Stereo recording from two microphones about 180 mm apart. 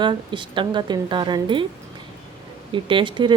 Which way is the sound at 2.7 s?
25° right (ahead or behind).